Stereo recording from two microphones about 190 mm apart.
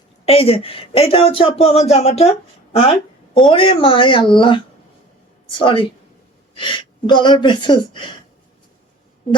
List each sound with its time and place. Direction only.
0.3 s speech: 30° left (ahead or behind)
3.4 s speech: 25° left (ahead or behind)